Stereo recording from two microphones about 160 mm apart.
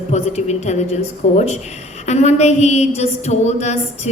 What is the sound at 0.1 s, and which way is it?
A woman's voice, 45° left (ahead or behind).